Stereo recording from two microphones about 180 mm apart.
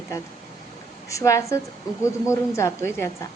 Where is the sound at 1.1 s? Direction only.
15° left (ahead or behind).